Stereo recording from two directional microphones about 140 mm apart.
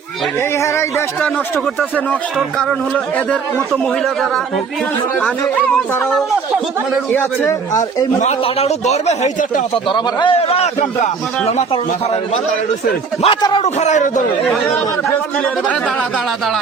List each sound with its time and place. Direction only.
0.6 s speech: 20° left (ahead or behind)
3.7 s speech: centre (ahead or behind)
7.1 s speech: 15° left (ahead or behind)
7.7 s speech: 25° left (ahead or behind)
8.2 s a man's voice: 50° left (ahead or behind)
9.9 s a man's voice: 35° left (ahead or behind); by 11.6 s 55° left (ahead or behind)
13.2 s a man's voice: 35° left (ahead or behind)
13.7 s a man's voice: 60° left (ahead or behind)